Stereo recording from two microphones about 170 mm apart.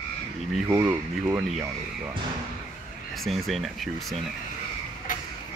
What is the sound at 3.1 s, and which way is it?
Speech, centre (ahead or behind).